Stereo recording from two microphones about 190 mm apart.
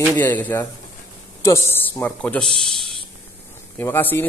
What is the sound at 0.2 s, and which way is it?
Speech, 10° left (ahead or behind).